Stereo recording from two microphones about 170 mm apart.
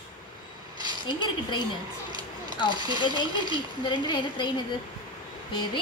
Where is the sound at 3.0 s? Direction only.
25° left (ahead or behind).